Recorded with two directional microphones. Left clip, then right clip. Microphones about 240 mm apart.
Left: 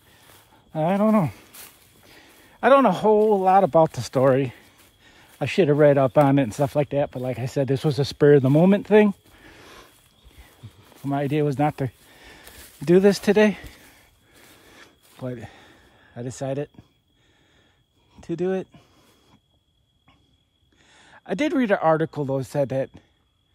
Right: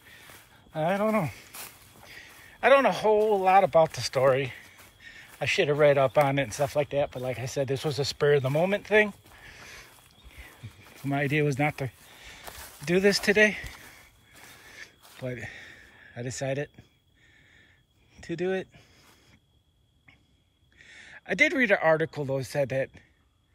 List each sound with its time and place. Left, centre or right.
0.7 s speech: left
2.0 s a sound: left
3.3 s speech: left
11.0 s speech: centre
14.7 s a sound: left
15.1 s speech: left
15.4 s a sound: centre
18.1 s speech: centre
20.7 s speech: centre